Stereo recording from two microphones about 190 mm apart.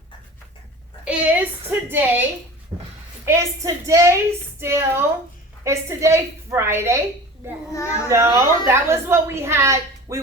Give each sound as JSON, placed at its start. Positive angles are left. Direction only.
{"t": 1.0, "sound": "a woman's voice", "side_deg": -5}
{"t": 2.7, "sound": "a sound", "side_deg": -20}
{"t": 3.2, "sound": "a woman's voice", "side_deg": -15}
{"t": 7.7, "sound": "a child's voice", "side_deg": 15}
{"t": 8.0, "sound": "a woman's voice", "side_deg": -15}